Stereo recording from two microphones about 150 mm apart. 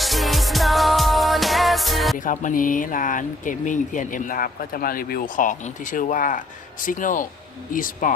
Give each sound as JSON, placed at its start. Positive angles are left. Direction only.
{"t": 0.0, "sound": "music", "side_deg": 0}
{"t": 2.1, "sound": "speech", "side_deg": 60}